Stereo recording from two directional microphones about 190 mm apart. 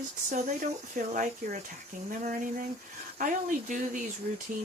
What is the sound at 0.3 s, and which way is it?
Speech, 40° right (ahead or behind).